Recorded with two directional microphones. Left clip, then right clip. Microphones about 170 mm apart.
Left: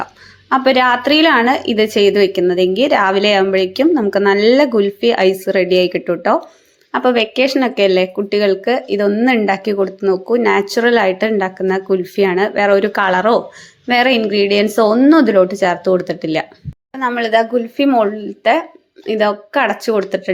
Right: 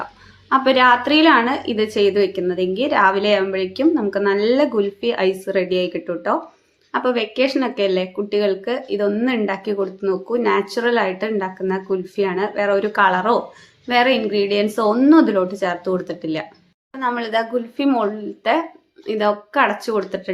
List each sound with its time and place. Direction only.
0.5 s speech: 30° left (ahead or behind)